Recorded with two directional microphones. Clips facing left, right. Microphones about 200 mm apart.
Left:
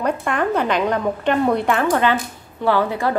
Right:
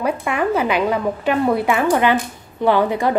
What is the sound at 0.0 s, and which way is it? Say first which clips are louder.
A woman's voice: right 1 dB; 5° right (ahead or behind).